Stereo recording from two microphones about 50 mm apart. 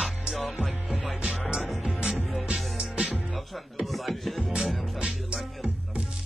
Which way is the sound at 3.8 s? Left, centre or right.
Centre.